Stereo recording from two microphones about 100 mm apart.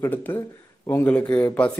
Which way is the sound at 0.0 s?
20° left (ahead or behind).